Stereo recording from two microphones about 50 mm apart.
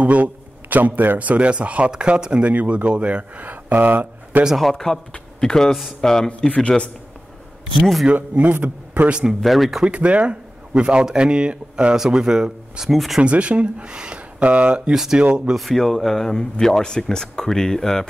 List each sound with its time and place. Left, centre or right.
0.0 s a man's voice: right
2.4 s speech: right
3.4 s speech: right
4.6 s speech: centre
8.1 s speech: right
9.4 s speech: centre
9.8 s speech: right
12.9 s speech: centre
13.2 s speech: right
14.9 s speech: centre
15.5 s speech: centre